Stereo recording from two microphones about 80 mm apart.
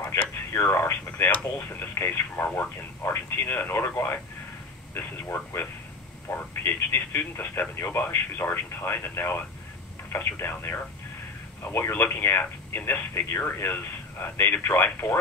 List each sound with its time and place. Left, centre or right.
0.0 s radio: left
3.0 s speech: left